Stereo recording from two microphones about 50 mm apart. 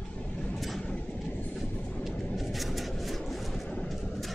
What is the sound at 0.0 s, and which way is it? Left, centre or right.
Vehicle, centre.